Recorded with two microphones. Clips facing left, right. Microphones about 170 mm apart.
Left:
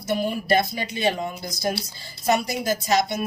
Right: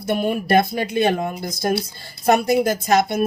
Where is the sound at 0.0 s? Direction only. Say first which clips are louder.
Right 4 dB; 60° right (ahead or behind).